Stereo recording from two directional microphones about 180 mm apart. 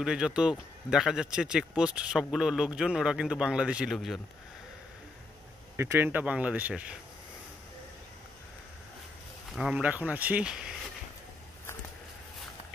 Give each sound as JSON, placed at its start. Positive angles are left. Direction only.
{"t": 0.0, "sound": "speech", "side_deg": -5}
{"t": 5.8, "sound": "speech", "side_deg": -15}
{"t": 9.5, "sound": "speech", "side_deg": -5}